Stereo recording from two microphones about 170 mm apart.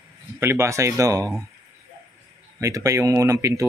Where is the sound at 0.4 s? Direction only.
15° right (ahead or behind).